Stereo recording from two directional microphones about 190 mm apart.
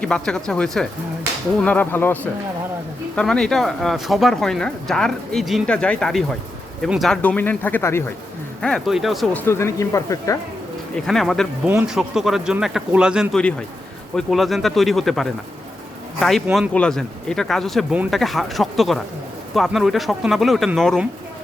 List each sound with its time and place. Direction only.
0.0 s speech: 5° left (ahead or behind)
8.6 s speech: centre (ahead or behind)
9.4 s speech: 15° left (ahead or behind)
10.9 s speech: centre (ahead or behind)